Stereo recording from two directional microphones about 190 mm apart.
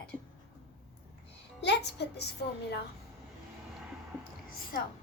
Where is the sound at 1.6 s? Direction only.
60° left (ahead or behind).